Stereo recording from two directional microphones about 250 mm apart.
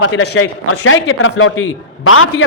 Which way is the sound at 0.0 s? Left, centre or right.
Left.